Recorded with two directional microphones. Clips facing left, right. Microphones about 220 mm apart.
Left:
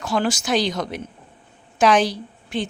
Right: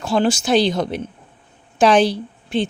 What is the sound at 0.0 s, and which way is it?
Speech, 30° right (ahead or behind).